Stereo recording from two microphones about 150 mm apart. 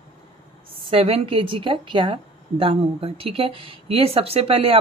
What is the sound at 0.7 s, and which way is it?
A woman's voice, 40° right (ahead or behind).